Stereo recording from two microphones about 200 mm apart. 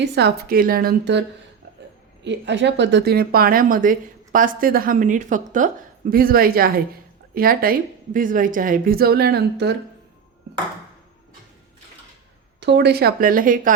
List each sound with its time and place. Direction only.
0.0 s a woman's voice: 55° right (ahead or behind)
2.2 s a woman's voice: 60° right (ahead or behind)
12.5 s a woman's voice: 60° right (ahead or behind); by 13.7 s 45° right (ahead or behind)